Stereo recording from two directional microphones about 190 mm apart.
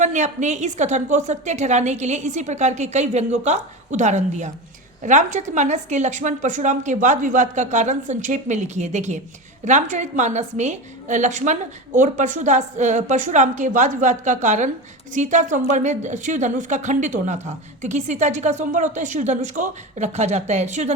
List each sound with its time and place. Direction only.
0.0 s a woman's voice: 40° right (ahead or behind)